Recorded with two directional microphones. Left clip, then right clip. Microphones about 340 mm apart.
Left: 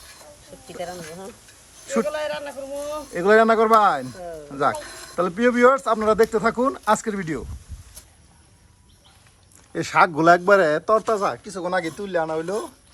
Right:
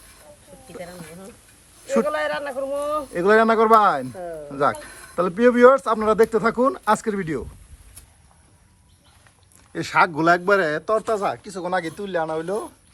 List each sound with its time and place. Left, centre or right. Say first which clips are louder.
0.8 s speech: left 5 dB; centre
1.9 s a man's voice: right 3 dB; centre
3.1 s speech: left 1 dB; centre
9.7 s speech: left 1 dB; centre